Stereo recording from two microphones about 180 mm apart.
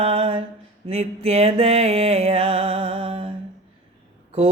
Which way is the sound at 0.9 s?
35° right (ahead or behind).